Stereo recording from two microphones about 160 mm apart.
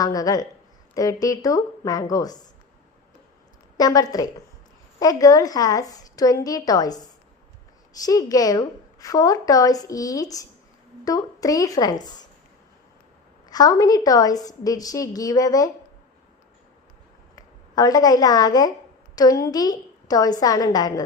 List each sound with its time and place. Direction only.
0.0 s a woman's voice: 20° left (ahead or behind)
3.8 s a woman's voice: 25° left (ahead or behind)
8.0 s a woman's voice: 20° left (ahead or behind)
13.5 s a woman's voice: 25° left (ahead or behind)
17.7 s a woman's voice: 25° left (ahead or behind)